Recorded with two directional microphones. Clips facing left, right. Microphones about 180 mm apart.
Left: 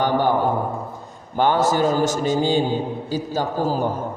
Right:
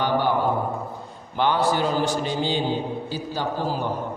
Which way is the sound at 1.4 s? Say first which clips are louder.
Left 3 dB; 45° left (ahead or behind).